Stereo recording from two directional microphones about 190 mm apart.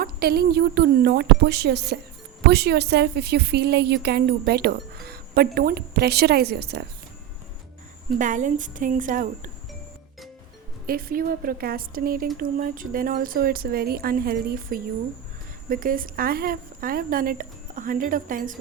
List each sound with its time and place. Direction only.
0.0 s speech: 55° right (ahead or behind)
8.2 s speech: 40° right (ahead or behind)
10.8 s speech: 50° right (ahead or behind)